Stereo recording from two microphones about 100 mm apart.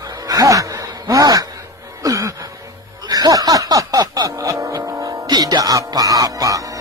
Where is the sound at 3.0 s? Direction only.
40° right (ahead or behind).